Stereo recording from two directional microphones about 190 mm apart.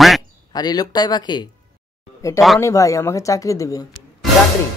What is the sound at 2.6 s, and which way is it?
Speech, 15° left (ahead or behind).